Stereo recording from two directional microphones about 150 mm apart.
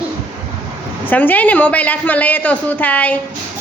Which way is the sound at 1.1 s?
10° left (ahead or behind).